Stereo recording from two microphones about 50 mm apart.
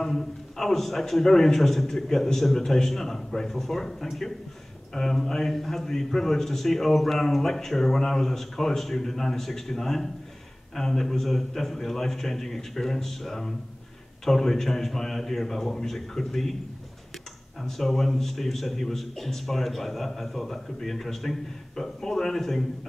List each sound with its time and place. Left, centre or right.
0.0 s a man's voice: centre
17.6 s speech: centre